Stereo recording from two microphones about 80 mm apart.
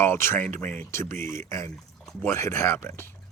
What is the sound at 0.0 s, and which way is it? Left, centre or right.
Speech, left.